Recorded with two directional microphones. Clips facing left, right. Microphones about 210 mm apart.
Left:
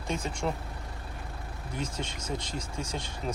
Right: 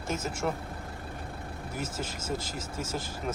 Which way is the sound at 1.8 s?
5° right (ahead or behind).